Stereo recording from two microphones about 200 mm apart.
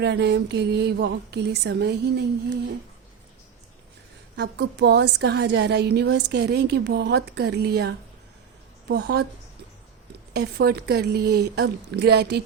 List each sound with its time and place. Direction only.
0.0 s a woman's voice: 55° right (ahead or behind)
4.4 s a woman's voice: 55° right (ahead or behind)
10.3 s a woman's voice: 55° right (ahead or behind)